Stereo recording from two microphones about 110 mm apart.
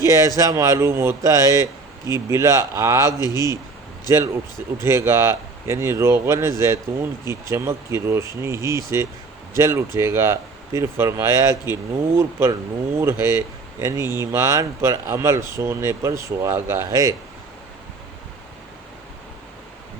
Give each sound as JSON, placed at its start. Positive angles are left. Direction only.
{"t": 0.0, "sound": "speech", "side_deg": -30}
{"t": 4.8, "sound": "speech", "side_deg": -25}